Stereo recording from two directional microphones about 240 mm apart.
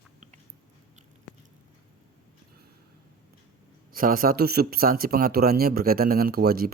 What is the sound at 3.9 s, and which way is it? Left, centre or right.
Speech, right.